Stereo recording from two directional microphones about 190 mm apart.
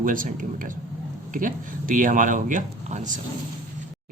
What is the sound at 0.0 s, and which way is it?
Speech, 45° right (ahead or behind).